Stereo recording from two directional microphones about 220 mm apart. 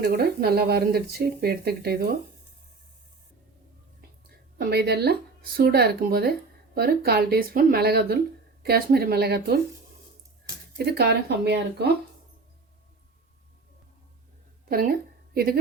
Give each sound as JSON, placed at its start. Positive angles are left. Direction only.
{"t": 0.0, "sound": "speech", "side_deg": -45}
{"t": 4.5, "sound": "speech", "side_deg": -45}
{"t": 10.8, "sound": "speech", "side_deg": -50}
{"t": 14.7, "sound": "speech", "side_deg": -40}